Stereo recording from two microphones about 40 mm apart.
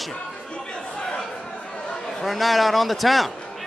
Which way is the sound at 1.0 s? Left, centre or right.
Left.